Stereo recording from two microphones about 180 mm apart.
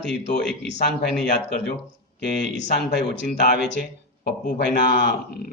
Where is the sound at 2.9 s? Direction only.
75° left (ahead or behind).